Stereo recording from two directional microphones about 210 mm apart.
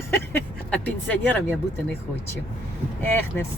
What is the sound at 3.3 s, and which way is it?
Speech, 5° left (ahead or behind).